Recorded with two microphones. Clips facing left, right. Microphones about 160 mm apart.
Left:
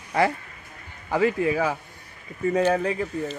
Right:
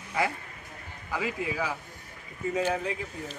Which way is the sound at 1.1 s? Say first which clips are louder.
Left 10 dB; 60° left (ahead or behind).